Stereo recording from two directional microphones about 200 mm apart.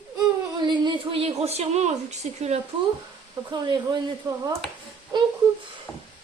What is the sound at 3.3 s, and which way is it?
Music, 20° right (ahead or behind).